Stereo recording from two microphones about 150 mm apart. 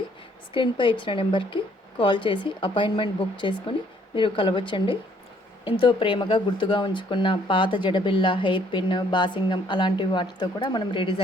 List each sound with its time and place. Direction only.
0.5 s speech: 35° left (ahead or behind)